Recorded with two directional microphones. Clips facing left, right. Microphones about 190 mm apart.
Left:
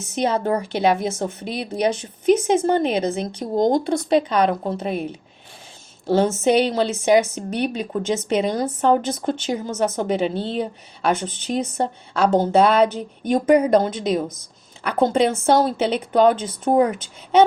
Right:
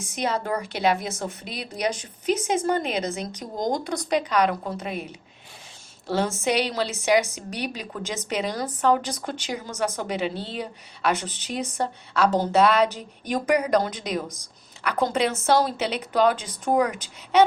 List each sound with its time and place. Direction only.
0.1 s speech: 25° left (ahead or behind)
6.1 s speech: 25° left (ahead or behind)